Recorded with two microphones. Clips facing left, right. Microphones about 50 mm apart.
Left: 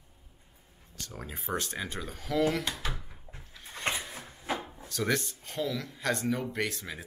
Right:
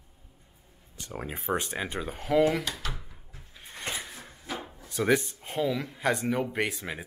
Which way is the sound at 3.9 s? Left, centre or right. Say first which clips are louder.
Left 3 dB; left.